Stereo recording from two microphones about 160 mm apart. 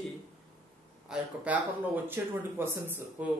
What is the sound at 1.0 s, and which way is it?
Speech, 5° right (ahead or behind).